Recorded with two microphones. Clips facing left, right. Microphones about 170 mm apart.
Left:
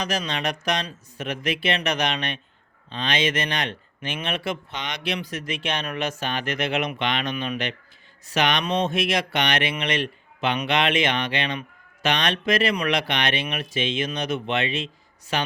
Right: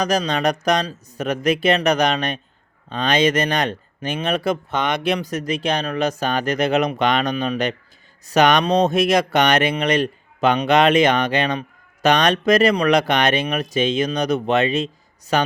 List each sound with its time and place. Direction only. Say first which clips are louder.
0.0 s speech: right 7 dB; 40° right (ahead or behind)